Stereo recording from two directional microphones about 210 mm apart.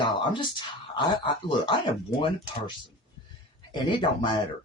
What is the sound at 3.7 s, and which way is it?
Speech, 25° left (ahead or behind).